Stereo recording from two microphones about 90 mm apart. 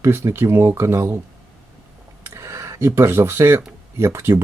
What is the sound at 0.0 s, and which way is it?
Speech, 30° right (ahead or behind).